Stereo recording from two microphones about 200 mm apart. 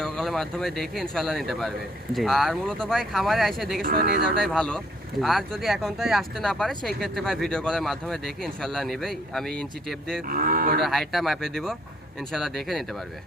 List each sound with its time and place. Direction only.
0.0 s speech: 5° left (ahead or behind)
3.8 s speech: 45° right (ahead or behind)
4.4 s speech: 5° left (ahead or behind)
10.2 s speech: 45° right (ahead or behind)
10.8 s speech: centre (ahead or behind)